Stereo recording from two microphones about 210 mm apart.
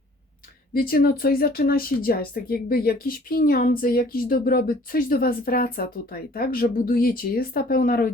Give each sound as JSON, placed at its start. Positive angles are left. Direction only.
{"t": 0.7, "sound": "speech", "side_deg": 45}